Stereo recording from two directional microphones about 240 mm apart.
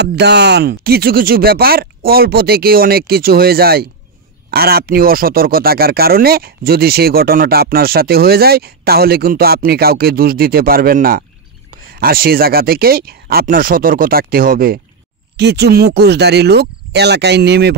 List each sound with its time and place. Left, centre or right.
0.0 s speech: right